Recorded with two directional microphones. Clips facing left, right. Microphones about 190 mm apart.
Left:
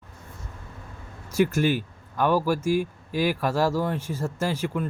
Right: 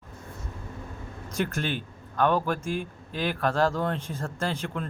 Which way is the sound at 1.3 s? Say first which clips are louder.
Left 7 dB; 10° left (ahead or behind).